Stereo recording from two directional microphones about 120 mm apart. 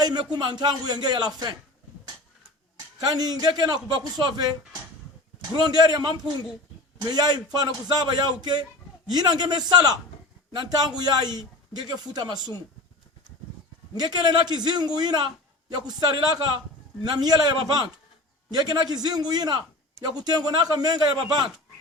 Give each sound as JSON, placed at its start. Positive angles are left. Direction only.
{"t": 0.0, "sound": "a man's voice", "side_deg": -35}
{"t": 2.7, "sound": "a man's voice", "side_deg": -35}
{"t": 13.9, "sound": "a man's voice", "side_deg": -35}